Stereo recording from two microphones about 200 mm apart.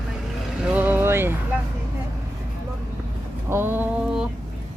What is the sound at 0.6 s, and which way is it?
Vehicle, 10° right (ahead or behind).